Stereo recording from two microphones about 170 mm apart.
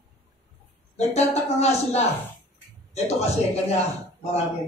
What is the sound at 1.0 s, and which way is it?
A man's voice, 40° left (ahead or behind).